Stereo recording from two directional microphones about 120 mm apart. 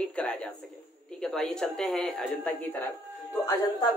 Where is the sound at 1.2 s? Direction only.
5° left (ahead or behind).